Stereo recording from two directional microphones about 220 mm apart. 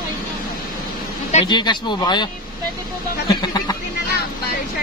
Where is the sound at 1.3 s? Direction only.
25° left (ahead or behind).